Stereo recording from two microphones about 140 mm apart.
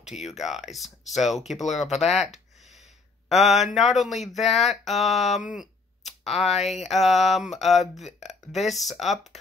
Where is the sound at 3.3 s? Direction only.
Centre (ahead or behind).